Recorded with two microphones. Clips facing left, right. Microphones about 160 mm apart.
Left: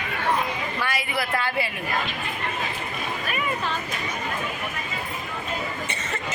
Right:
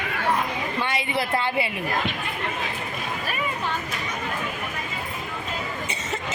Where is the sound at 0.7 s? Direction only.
25° right (ahead or behind).